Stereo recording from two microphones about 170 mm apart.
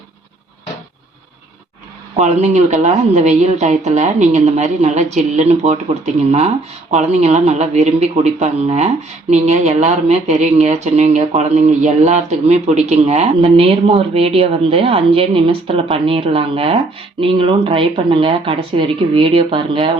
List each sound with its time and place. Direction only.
2.1 s speech: 45° right (ahead or behind)